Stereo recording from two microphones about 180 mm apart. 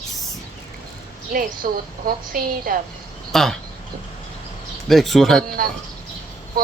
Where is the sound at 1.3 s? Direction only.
55° right (ahead or behind).